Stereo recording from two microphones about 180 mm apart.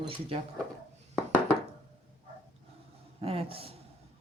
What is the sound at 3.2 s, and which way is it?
Speech, 35° right (ahead or behind).